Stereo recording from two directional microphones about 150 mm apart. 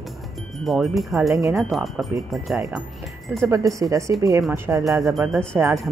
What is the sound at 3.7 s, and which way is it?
Speech, 20° right (ahead or behind).